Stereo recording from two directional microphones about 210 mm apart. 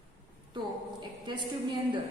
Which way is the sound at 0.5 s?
20° right (ahead or behind).